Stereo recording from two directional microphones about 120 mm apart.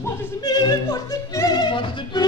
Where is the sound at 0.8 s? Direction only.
25° left (ahead or behind); by 2.2 s 45° left (ahead or behind).